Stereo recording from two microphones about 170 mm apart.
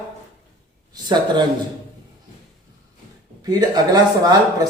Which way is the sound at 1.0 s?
25° right (ahead or behind).